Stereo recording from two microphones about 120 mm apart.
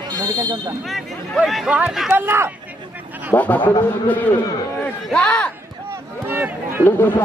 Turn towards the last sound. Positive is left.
turn(degrees=15)  # may be behind; listen again after turning